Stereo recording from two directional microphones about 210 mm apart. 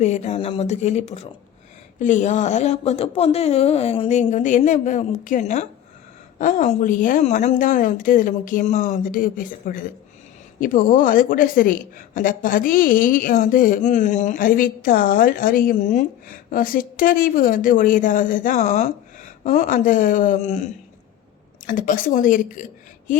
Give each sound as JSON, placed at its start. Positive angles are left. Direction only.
{"t": 0.0, "sound": "a woman's voice", "side_deg": 35}
{"t": 21.7, "sound": "a woman's voice", "side_deg": 40}